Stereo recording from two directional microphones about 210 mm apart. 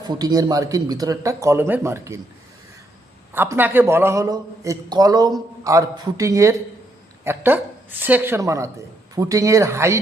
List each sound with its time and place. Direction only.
0.0 s a man's voice: 20° right (ahead or behind)
3.3 s a man's voice: 10° right (ahead or behind)